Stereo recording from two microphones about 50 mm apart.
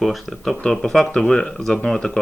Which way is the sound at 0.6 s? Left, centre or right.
Centre.